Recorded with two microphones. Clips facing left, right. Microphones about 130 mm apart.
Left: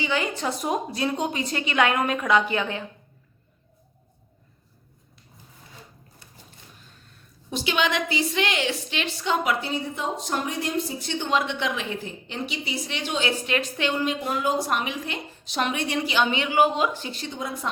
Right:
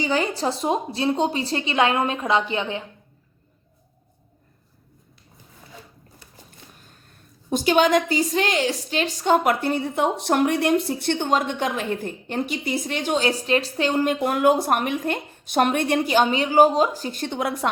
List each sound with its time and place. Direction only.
0.0 s a woman's voice: 35° right (ahead or behind)
7.5 s a woman's voice: 45° right (ahead or behind); by 17.7 s 70° right (ahead or behind)